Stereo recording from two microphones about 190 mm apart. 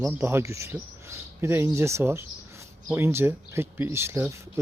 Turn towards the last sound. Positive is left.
turn(degrees=-15)  # may be behind; listen again after turning